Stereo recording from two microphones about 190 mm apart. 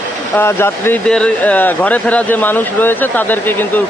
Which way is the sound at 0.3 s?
10° left (ahead or behind).